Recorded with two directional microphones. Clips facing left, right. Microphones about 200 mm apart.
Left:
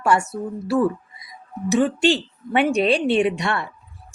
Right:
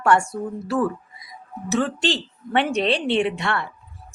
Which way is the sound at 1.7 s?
10° left (ahead or behind).